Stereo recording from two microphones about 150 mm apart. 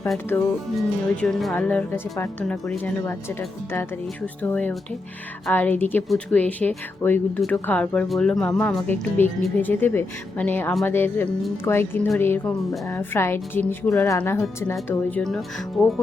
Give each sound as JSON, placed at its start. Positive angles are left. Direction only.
{"t": 0.3, "sound": "speech", "side_deg": 15}
{"t": 0.8, "sound": "speech", "side_deg": 0}
{"t": 15.2, "sound": "speech", "side_deg": 0}